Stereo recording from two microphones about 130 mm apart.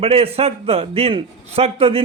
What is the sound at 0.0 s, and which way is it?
A man's voice, 50° right (ahead or behind).